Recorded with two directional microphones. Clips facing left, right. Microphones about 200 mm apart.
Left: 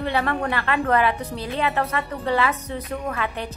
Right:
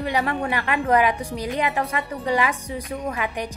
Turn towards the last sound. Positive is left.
turn(degrees=-15)  # may be behind; listen again after turning